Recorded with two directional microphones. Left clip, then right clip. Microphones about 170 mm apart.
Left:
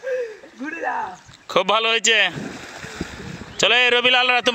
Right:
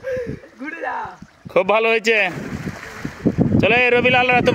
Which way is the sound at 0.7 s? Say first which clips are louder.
Left 1 dB; 40° left (ahead or behind).